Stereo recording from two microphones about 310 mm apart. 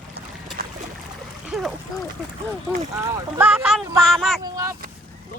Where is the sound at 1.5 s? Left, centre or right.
Centre.